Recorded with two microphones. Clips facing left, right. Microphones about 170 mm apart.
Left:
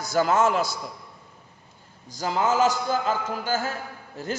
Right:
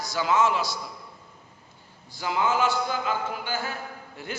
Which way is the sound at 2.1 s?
40° left (ahead or behind).